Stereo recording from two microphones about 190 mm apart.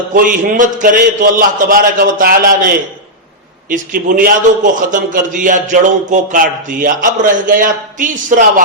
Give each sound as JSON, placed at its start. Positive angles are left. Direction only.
{"t": 0.1, "sound": "a man's voice", "side_deg": -45}